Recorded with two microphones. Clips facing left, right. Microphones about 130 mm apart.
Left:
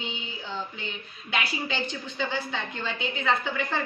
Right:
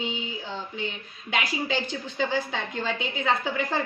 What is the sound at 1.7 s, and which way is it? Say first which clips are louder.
A woman's voice: right 3 dB; 40° right (ahead or behind).